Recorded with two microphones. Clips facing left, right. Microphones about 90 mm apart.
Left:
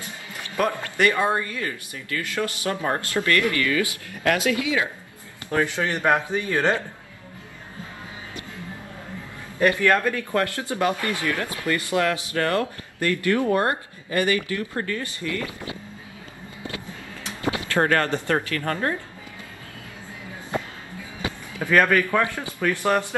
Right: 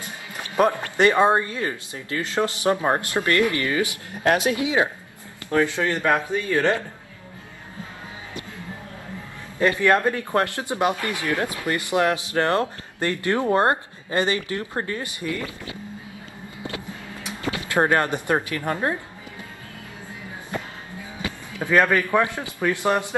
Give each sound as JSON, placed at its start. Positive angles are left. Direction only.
{"t": 0.6, "sound": "speech", "side_deg": -25}
{"t": 5.5, "sound": "speech", "side_deg": 20}
{"t": 9.6, "sound": "speech", "side_deg": -20}
{"t": 17.2, "sound": "speech", "side_deg": -20}
{"t": 21.5, "sound": "a man's voice", "side_deg": -15}